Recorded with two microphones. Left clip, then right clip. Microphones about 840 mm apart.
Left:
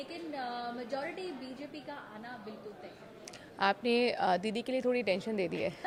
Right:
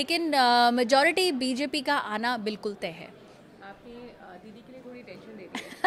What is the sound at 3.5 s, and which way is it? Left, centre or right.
A woman's voice, left.